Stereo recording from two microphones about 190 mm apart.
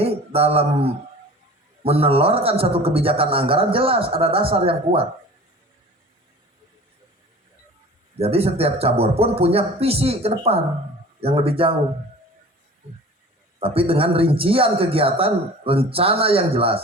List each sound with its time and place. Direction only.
0.0 s a sound: 30° right (ahead or behind)
1.8 s a man's voice: 30° right (ahead or behind)
8.2 s a man's voice: 30° right (ahead or behind)
13.6 s a man's voice: 30° right (ahead or behind)